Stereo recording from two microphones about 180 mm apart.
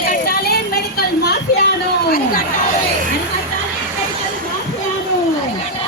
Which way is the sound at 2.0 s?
55° left (ahead or behind).